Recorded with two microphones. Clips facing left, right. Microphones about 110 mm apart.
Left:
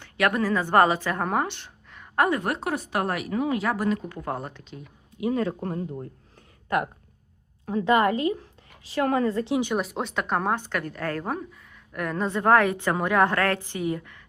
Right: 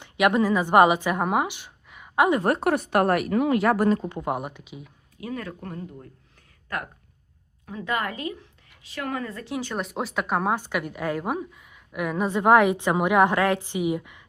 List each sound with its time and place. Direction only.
0.0 s a woman's voice: 20° right (ahead or behind)
2.6 s speech: 60° right (ahead or behind)
3.8 s a woman's voice: 30° right (ahead or behind); by 4.9 s 10° right (ahead or behind)
5.1 s speech: 25° left (ahead or behind)
7.6 s a woman's voice: 40° left (ahead or behind)
7.9 s a woman's voice: 25° left (ahead or behind)
9.7 s a woman's voice: centre (ahead or behind)